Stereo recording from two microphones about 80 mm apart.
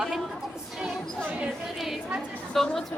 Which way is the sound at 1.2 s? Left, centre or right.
Centre.